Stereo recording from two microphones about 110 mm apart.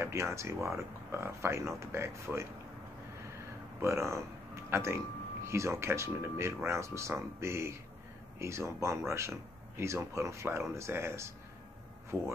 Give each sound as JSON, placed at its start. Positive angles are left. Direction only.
{"t": 0.0, "sound": "speech", "side_deg": -25}
{"t": 3.8, "sound": "speech", "side_deg": -25}